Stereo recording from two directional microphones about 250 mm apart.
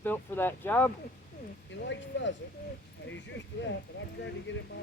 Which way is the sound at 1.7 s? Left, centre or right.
Left.